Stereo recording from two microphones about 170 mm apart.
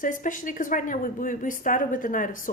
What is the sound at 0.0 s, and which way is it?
A woman's voice, 50° left (ahead or behind).